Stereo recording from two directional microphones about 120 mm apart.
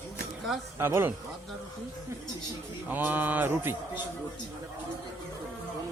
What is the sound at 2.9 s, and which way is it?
Speech, 15° right (ahead or behind).